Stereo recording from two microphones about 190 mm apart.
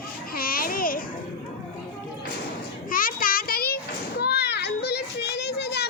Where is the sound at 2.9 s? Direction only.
50° left (ahead or behind).